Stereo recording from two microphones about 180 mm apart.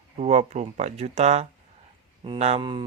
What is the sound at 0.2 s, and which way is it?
Speech, 35° right (ahead or behind).